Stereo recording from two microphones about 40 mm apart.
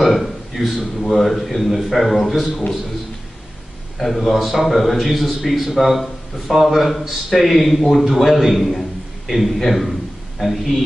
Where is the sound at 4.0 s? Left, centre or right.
Centre.